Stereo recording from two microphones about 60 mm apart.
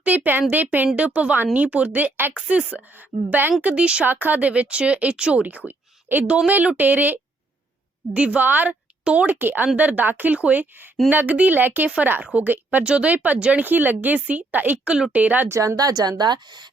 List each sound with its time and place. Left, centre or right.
0.0 s speech: right
4.0 s speech: right
6.2 s speech: centre
15.6 s speech: right